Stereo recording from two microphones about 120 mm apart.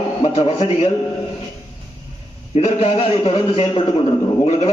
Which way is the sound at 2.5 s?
55° left (ahead or behind).